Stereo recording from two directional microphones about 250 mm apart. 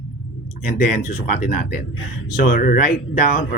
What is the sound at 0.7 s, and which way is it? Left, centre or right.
Speech, left.